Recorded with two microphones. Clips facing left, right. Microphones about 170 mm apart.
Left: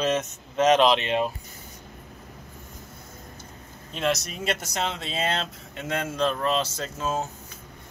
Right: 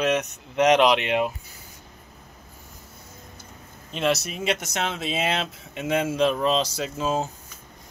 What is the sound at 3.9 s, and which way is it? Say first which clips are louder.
Speech: right 2 dB; 5° right (ahead or behind).